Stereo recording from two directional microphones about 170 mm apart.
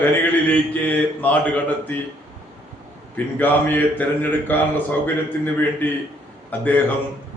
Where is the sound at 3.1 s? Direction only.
10° left (ahead or behind).